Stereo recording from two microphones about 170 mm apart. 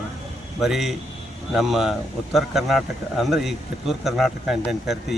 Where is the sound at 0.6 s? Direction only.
Centre (ahead or behind).